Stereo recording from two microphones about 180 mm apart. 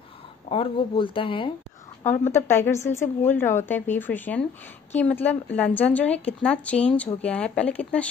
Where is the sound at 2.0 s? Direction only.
15° left (ahead or behind).